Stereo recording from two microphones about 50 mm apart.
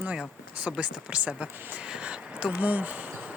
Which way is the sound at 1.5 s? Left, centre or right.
Right.